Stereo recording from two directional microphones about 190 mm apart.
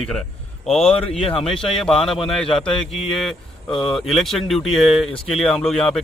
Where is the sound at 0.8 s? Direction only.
30° left (ahead or behind).